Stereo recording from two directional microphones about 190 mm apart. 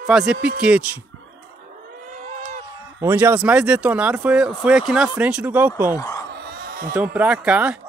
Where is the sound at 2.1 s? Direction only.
40° right (ahead or behind).